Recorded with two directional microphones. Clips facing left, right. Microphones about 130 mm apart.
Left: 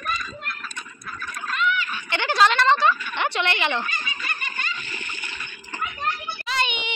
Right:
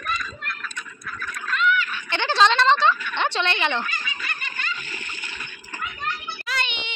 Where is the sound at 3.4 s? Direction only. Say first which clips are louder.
Even; 15° left (ahead or behind).